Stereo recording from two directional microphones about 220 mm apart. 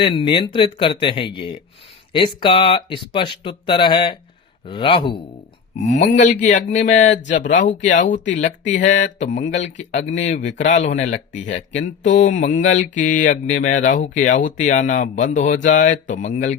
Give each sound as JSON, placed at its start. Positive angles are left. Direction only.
{"t": 0.0, "sound": "speech", "side_deg": 20}
{"t": 5.8, "sound": "speech", "side_deg": 35}